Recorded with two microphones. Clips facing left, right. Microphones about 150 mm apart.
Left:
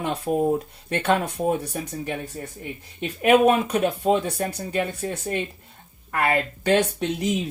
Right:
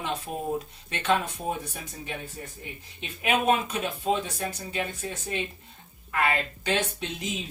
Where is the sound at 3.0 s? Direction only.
65° left (ahead or behind).